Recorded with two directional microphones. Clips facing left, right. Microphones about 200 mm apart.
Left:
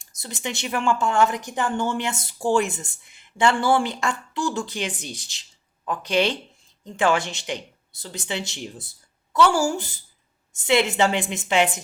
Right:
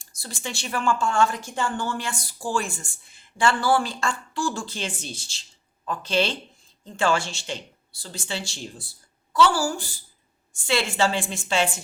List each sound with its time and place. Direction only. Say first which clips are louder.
0.0 s a woman's voice: left 3 dB; 20° left (ahead or behind)